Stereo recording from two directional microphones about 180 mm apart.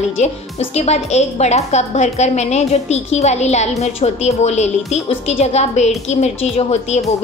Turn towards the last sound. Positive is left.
turn(degrees=35)  # may be behind; listen again after turning